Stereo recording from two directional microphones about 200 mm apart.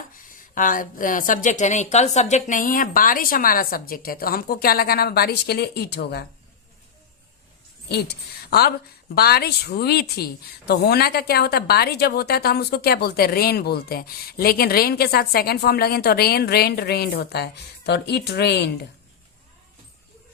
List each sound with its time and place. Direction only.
0.2 s a woman's voice: 40° left (ahead or behind)
7.9 s a woman's voice: 55° left (ahead or behind)